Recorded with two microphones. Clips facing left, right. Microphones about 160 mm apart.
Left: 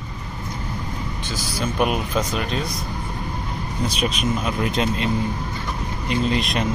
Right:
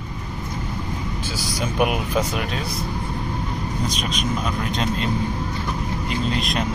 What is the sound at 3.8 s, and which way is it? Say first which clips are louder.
Speech: left 5 dB; 5° left (ahead or behind).